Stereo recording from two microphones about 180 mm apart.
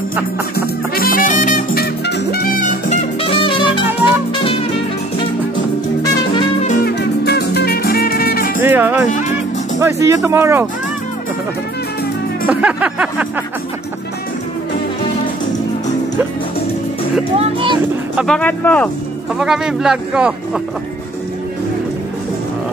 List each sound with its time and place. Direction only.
0.6 s music: 55° left (ahead or behind)
2.9 s music: 30° left (ahead or behind)
6.8 s music: 65° left (ahead or behind)
8.6 s speech: 10° right (ahead or behind)
12.4 s a sound: 10° right (ahead or behind)
17.4 s speech: 30° right (ahead or behind)
18.2 s speech: 5° left (ahead or behind)
19.3 s speech: 5° right (ahead or behind)